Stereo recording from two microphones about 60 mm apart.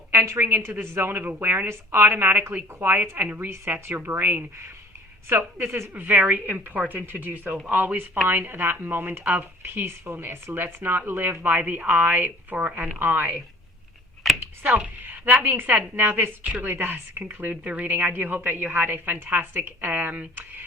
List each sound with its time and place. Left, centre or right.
0.1 s a woman's voice: right
3.8 s speech: right
5.3 s a woman's voice: right
5.9 s speech: right
14.3 s a sound: centre
14.6 s a woman's voice: right